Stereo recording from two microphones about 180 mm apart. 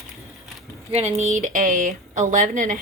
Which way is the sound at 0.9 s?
40° right (ahead or behind).